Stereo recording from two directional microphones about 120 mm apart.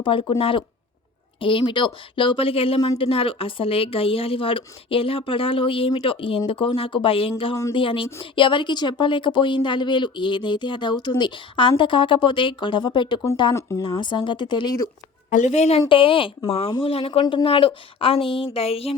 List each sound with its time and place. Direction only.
0.0 s speech: 45° left (ahead or behind)
13.5 s speech: 25° left (ahead or behind)
13.8 s speech: 40° left (ahead or behind)
15.3 s a woman's voice: 85° left; by 15.8 s 65° left (ahead or behind)
15.9 s speech: 45° left (ahead or behind)